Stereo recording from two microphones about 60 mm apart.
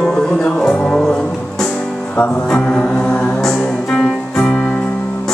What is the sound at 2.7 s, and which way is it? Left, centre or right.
Music, centre.